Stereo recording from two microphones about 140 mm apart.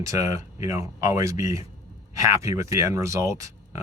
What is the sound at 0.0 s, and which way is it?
Speech, 20° right (ahead or behind).